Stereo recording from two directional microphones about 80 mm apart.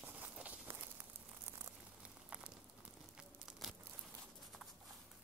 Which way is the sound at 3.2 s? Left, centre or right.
Centre.